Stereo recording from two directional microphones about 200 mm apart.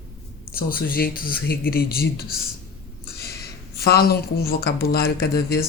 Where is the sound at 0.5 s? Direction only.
45° left (ahead or behind).